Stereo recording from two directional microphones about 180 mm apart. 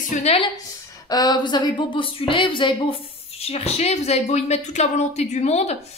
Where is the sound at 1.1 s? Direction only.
25° left (ahead or behind).